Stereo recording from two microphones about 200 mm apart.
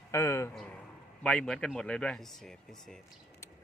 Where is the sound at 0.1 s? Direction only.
15° left (ahead or behind).